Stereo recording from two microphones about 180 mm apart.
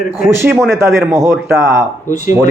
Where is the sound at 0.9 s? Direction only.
15° right (ahead or behind).